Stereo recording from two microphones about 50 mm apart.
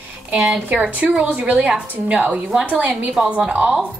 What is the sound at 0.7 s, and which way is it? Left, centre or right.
A woman's voice, right.